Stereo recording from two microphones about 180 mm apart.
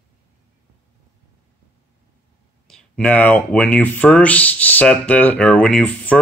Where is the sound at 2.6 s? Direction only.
5° left (ahead or behind).